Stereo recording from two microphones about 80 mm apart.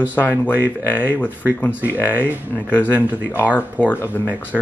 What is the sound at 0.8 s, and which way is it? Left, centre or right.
Speech, left.